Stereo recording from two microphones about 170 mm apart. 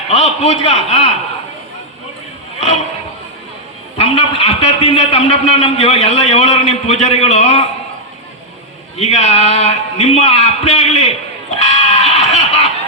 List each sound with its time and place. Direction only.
0.1 s a man's voice: 40° left (ahead or behind)
3.9 s a man's voice: 35° left (ahead or behind)
9.0 s a man's voice: 40° left (ahead or behind)
11.6 s a sound: 40° left (ahead or behind)